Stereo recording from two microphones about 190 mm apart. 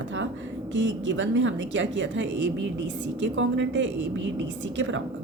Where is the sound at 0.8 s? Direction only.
75° right (ahead or behind).